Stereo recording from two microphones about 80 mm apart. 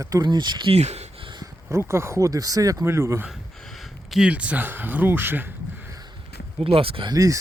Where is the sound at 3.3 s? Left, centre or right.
Centre.